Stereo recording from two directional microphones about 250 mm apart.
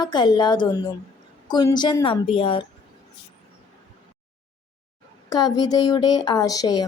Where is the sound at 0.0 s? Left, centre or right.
Centre.